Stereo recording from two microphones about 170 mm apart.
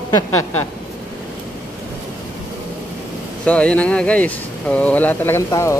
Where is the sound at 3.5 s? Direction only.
10° left (ahead or behind).